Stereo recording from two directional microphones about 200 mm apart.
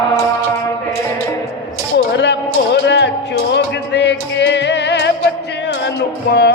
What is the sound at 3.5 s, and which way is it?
Music, 60° left (ahead or behind).